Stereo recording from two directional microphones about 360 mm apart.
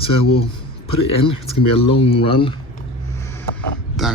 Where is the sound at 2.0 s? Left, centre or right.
Centre.